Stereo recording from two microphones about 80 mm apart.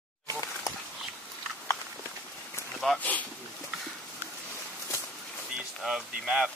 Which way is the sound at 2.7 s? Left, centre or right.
Centre.